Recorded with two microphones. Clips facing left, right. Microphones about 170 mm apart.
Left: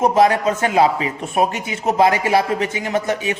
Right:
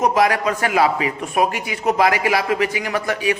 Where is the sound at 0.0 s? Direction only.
30° left (ahead or behind).